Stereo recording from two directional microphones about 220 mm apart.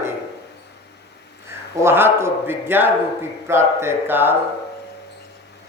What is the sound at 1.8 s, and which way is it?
A man's voice, 10° right (ahead or behind).